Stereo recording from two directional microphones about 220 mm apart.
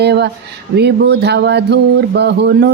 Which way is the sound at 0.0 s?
50° right (ahead or behind).